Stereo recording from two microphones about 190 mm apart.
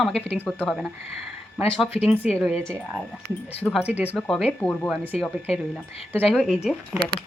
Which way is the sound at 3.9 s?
35° left (ahead or behind).